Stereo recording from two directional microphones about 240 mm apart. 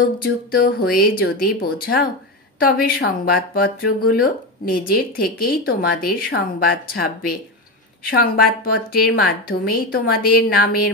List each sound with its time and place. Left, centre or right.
0.2 s speech: left